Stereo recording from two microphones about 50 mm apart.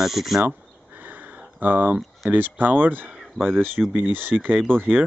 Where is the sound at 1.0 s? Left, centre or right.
Right.